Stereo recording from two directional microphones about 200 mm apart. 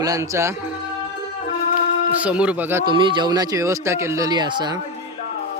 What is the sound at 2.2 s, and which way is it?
Speech, 5° right (ahead or behind).